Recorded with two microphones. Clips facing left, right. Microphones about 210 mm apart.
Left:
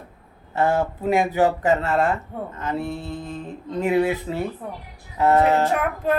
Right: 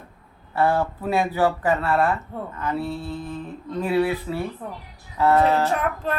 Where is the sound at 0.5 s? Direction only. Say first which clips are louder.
Even; 20° left (ahead or behind).